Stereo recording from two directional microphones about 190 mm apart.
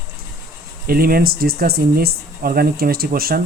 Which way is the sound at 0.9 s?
50° right (ahead or behind).